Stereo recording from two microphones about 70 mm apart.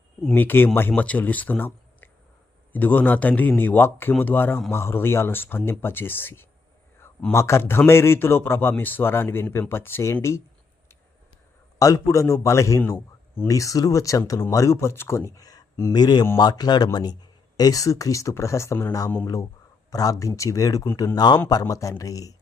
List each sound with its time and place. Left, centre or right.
0.3 s a man's voice: left
11.8 s speech: left
15.9 s speech: left
17.6 s speech: left